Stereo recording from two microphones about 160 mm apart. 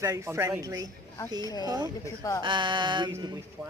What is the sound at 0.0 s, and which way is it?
Speech, 20° right (ahead or behind).